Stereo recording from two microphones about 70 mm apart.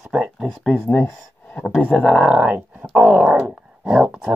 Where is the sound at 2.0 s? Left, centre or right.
Centre.